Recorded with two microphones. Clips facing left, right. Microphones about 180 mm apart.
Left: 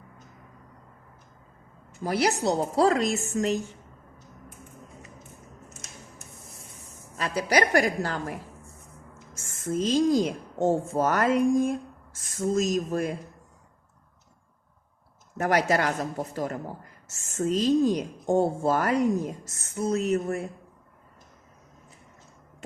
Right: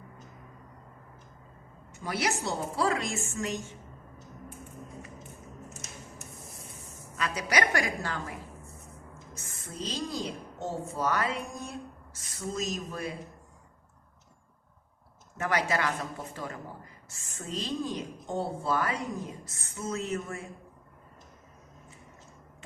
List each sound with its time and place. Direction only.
2.0 s a woman's voice: 35° left (ahead or behind)
7.2 s a woman's voice: 30° left (ahead or behind)
9.5 s a woman's voice: 45° left (ahead or behind)
15.4 s a woman's voice: 40° left (ahead or behind)